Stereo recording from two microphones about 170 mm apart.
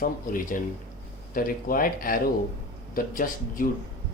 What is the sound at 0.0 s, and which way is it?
Speech, 55° left (ahead or behind).